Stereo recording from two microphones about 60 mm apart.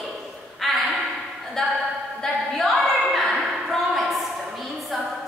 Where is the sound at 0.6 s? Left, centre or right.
Centre.